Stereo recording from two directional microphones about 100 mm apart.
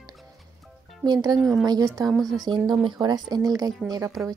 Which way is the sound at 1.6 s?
40° right (ahead or behind).